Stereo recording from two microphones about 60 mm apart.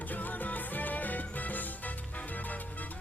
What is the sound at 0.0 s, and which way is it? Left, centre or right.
Music, left.